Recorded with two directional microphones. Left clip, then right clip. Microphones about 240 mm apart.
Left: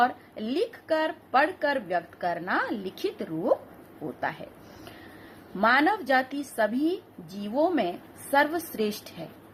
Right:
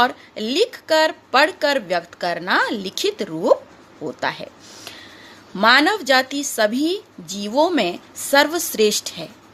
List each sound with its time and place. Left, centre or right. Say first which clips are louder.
0.0 s a woman's voice: right 6 dB; right
5.5 s a woman's voice: right 8 dB; right